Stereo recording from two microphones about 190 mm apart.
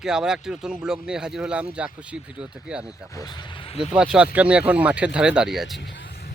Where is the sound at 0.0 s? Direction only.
5° right (ahead or behind).